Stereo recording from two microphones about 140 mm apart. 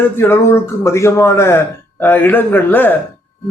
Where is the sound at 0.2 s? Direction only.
15° left (ahead or behind).